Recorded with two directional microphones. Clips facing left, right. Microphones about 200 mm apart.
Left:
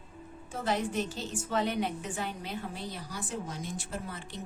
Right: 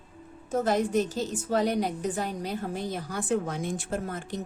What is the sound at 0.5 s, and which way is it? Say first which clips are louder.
A woman's voice: right 7 dB; 40° right (ahead or behind).